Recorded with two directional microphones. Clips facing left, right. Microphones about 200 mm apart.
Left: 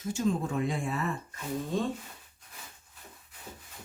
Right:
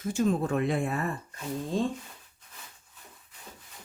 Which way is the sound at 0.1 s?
55° right (ahead or behind).